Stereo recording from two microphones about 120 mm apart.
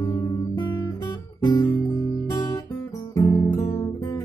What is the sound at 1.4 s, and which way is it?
Guitar, 35° left (ahead or behind).